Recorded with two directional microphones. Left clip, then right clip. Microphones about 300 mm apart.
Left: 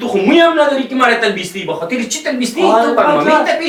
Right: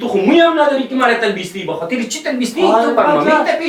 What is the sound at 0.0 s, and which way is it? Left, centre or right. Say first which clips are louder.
Speech: left 1 dB; centre.